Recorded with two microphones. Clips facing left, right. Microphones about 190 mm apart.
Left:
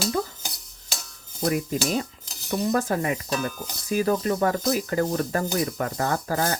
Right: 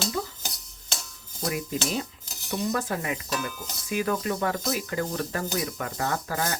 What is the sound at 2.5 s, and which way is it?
Stir, 40° left (ahead or behind).